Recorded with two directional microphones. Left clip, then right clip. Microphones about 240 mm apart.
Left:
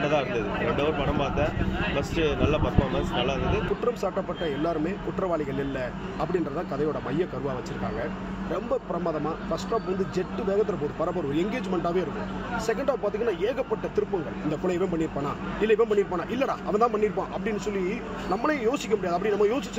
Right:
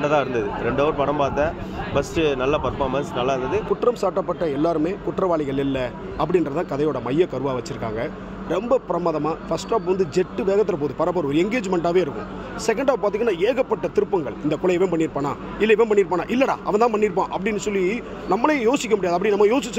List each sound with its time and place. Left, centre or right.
0.0 s speech: right